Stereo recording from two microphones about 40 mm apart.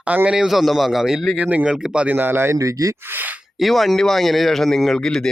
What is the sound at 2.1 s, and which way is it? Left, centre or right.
Speech, right.